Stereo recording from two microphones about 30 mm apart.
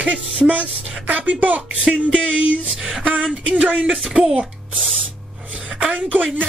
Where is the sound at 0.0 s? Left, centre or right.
Right.